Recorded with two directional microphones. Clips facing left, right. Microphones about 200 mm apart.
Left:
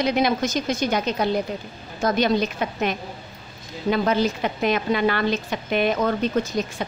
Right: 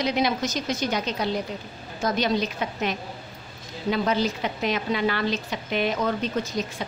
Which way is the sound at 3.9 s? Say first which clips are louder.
Left 3 dB; 55° left (ahead or behind).